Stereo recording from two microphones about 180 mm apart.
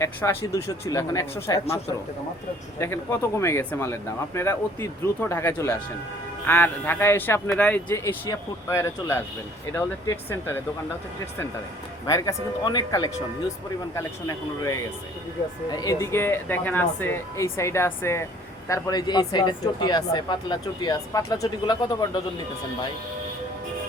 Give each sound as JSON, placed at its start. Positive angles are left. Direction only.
{"t": 0.0, "sound": "speech", "side_deg": 15}
{"t": 2.7, "sound": "speech", "side_deg": 15}
{"t": 12.0, "sound": "speech", "side_deg": 20}